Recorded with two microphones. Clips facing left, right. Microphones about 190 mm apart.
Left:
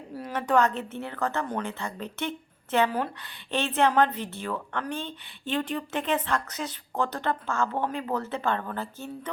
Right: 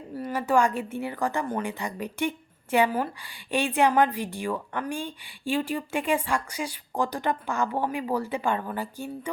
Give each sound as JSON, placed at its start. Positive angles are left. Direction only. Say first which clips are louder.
{"t": 0.1, "sound": "speech", "louder": "right 1 dB", "side_deg": -5}